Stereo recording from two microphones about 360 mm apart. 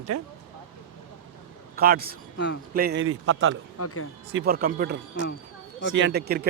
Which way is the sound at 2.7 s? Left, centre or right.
Right.